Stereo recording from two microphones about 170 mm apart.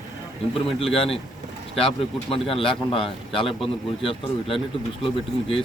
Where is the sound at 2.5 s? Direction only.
30° left (ahead or behind).